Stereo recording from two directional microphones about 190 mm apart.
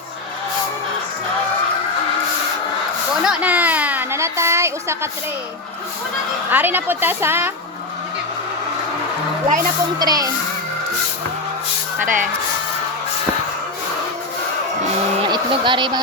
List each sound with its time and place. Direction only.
3.2 s a sound: 10° right (ahead or behind)
6.5 s a woman's voice: 10° right (ahead or behind)
10.0 s a child's voice: 20° right (ahead or behind)
12.0 s speech: 45° right (ahead or behind)
15.3 s speech: 25° right (ahead or behind)